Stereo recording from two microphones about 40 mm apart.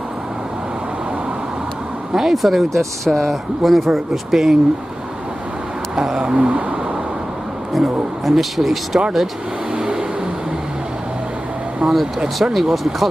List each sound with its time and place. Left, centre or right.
2.1 s speech: centre
5.9 s a sound: centre
6.3 s a sound: right
7.7 s speech: centre
9.8 s vehicle: centre
11.8 s speech: centre
12.5 s speech: centre